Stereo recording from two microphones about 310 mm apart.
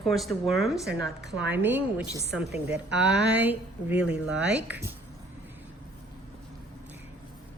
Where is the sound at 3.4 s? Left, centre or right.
Centre.